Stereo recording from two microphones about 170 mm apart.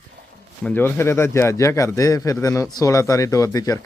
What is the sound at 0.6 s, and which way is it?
A man's voice, 10° left (ahead or behind).